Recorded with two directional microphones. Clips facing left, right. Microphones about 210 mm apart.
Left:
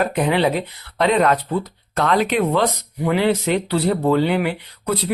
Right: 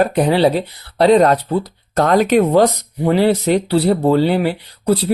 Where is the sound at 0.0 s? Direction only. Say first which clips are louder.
Right 5 dB; 35° right (ahead or behind).